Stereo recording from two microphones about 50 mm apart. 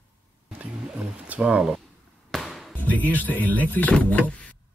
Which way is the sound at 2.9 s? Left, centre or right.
Left.